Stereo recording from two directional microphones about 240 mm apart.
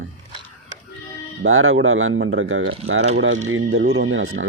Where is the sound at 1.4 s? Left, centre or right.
Right.